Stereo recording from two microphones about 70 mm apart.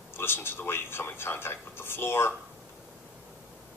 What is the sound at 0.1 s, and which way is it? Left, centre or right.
Speech, left.